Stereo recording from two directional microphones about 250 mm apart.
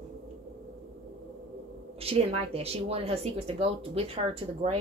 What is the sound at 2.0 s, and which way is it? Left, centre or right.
Speech, right.